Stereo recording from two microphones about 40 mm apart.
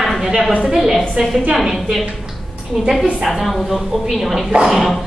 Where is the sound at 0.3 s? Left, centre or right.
Right.